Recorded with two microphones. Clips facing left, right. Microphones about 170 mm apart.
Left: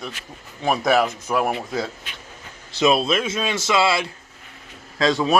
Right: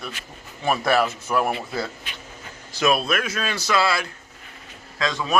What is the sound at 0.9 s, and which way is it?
Speech, 15° left (ahead or behind).